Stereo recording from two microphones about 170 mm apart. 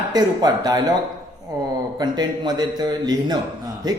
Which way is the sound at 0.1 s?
25° right (ahead or behind).